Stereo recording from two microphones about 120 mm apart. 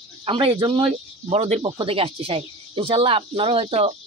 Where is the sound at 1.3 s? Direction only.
65° right (ahead or behind).